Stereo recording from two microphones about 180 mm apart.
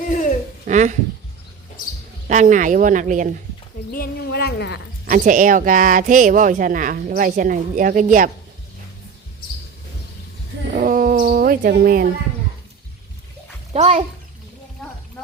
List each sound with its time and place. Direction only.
0.7 s speech: 40° right (ahead or behind)
2.2 s speech: 45° right (ahead or behind)
3.9 s a woman's voice: 60° left (ahead or behind)
5.0 s speech: 45° right (ahead or behind)
10.7 s speech: 50° right (ahead or behind)
13.7 s a child's voice: 35° right (ahead or behind)